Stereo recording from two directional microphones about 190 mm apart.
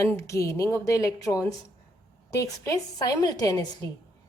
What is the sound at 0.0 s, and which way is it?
A woman's voice, 15° left (ahead or behind).